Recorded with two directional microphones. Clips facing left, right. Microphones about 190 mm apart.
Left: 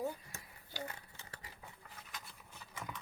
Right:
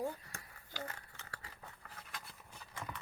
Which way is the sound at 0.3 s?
15° left (ahead or behind).